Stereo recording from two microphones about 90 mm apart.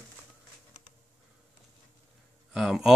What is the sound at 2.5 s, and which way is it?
Speech, centre (ahead or behind).